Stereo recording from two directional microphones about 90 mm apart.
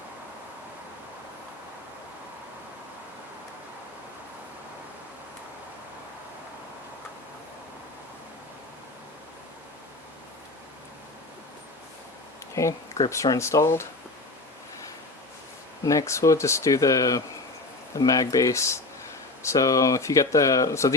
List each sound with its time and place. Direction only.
12.5 s a sound: 35° left (ahead or behind)
13.2 s speech: 35° left (ahead or behind)
15.8 s speech: 40° left (ahead or behind)